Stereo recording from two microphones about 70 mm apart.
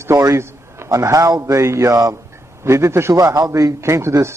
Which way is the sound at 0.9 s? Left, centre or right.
Right.